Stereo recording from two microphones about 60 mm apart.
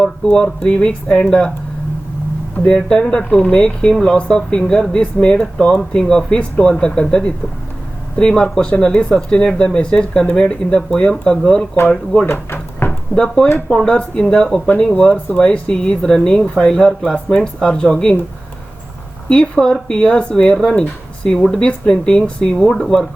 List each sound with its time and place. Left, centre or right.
0.3 s speech: centre
2.6 s speech: centre
12.2 s drawer open or close: left
13.1 s speech: centre
19.3 s speech: centre